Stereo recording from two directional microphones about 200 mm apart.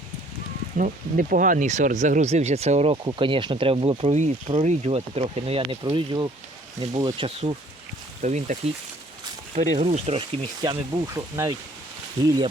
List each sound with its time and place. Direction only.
0.8 s speech: 45° right (ahead or behind); by 7.5 s 25° right (ahead or behind)
8.2 s speech: 35° right (ahead or behind)
9.7 s speech: 30° right (ahead or behind)